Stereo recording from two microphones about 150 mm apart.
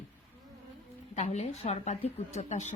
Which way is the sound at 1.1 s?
50° left (ahead or behind).